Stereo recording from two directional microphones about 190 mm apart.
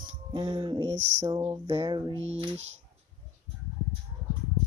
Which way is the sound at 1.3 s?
20° right (ahead or behind).